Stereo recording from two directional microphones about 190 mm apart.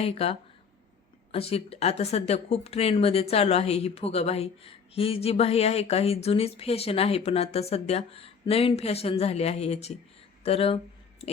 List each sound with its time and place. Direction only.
0.0 s speech: 30° left (ahead or behind)